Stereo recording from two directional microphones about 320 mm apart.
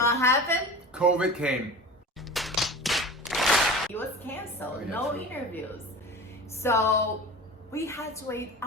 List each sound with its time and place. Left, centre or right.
0.0 s a woman's voice: centre
0.9 s speech: centre
2.3 s a sound: centre
4.6 s a woman's voice: centre